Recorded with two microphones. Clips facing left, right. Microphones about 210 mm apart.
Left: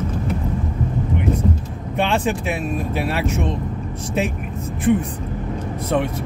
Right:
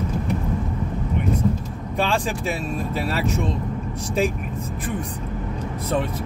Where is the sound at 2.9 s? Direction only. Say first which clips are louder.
Left 1 dB; 65° left (ahead or behind).